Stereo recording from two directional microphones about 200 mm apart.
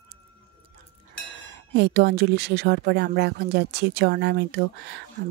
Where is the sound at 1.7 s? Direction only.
55° right (ahead or behind).